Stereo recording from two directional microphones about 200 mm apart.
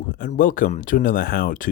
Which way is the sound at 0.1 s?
45° left (ahead or behind).